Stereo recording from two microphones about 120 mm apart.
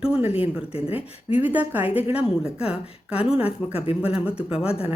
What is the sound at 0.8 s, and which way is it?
Speech, 10° right (ahead or behind).